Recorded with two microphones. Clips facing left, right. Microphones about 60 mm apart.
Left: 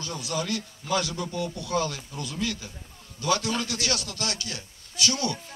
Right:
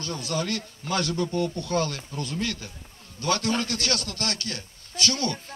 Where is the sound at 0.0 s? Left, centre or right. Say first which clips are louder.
Right 2 dB; right.